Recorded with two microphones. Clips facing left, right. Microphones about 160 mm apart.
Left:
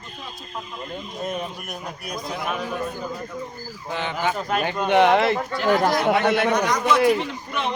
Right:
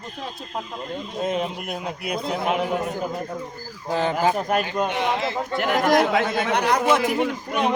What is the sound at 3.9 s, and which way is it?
Speech, 40° right (ahead or behind).